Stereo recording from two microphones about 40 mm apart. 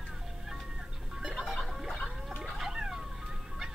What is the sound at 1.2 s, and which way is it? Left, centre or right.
Music, centre.